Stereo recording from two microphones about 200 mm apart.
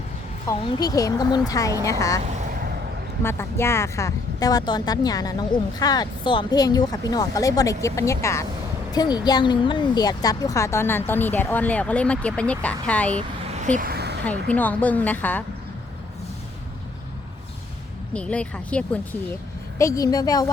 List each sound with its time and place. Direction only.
0.4 s a woman's voice: 20° left (ahead or behind)
2.2 s vehicle: 45° right (ahead or behind)
3.2 s a woman's voice: 10° left (ahead or behind)
13.5 s a sound: 35° right (ahead or behind); by 14.2 s 55° right (ahead or behind)
14.3 s a woman's voice: 5° left (ahead or behind)
18.1 s speech: 5° left (ahead or behind)
19.8 s speech: 15° left (ahead or behind)